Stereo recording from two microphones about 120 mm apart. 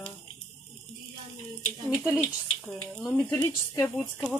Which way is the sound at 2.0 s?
10° right (ahead or behind).